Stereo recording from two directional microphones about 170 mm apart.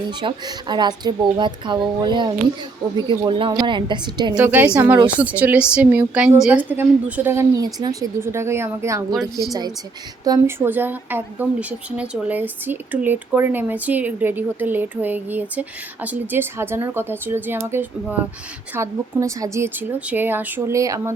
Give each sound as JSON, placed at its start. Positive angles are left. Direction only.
{"t": 0.1, "sound": "speech", "side_deg": -25}
{"t": 4.4, "sound": "speech", "side_deg": -10}